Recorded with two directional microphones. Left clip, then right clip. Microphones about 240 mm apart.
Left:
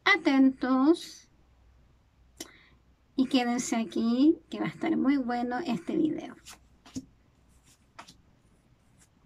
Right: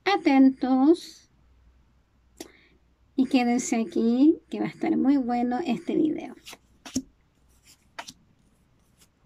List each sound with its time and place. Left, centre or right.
0.0 s speech: centre
3.2 s speech: centre
6.5 s a sound: right
7.9 s vehicle: right